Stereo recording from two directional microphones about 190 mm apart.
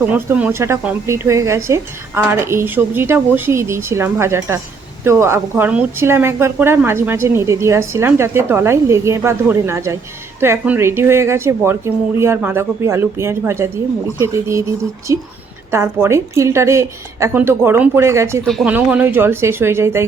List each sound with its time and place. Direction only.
0.1 s a woman's voice: 10° right (ahead or behind)
18.4 s a woman's voice: centre (ahead or behind)